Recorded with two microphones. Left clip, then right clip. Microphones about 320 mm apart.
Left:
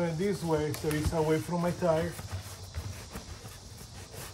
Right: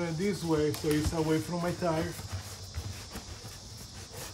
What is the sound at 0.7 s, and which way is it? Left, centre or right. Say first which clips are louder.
Speech: right 2 dB; centre.